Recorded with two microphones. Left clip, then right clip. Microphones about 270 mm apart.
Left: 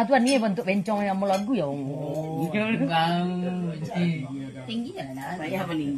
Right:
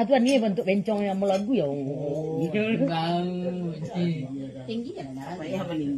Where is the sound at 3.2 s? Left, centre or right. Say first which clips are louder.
Even; centre.